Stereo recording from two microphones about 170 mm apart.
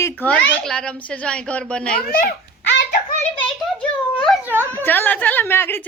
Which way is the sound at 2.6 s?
90° left.